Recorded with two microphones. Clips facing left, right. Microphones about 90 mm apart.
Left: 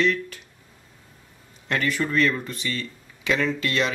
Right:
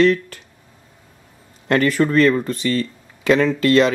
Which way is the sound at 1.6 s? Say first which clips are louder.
Right 8 dB; 45° right (ahead or behind).